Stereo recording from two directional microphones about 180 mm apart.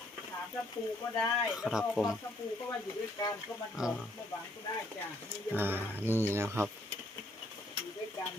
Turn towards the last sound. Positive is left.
turn(degrees=-15)  # may be behind; listen again after turning